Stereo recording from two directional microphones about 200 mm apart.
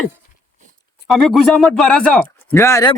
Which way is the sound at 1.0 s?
Centre (ahead or behind).